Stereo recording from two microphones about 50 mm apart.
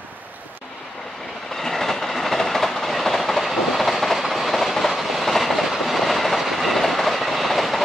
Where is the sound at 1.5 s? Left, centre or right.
Centre.